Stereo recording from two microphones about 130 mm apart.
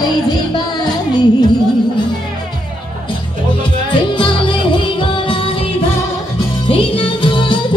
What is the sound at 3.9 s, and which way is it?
Music, 40° left (ahead or behind).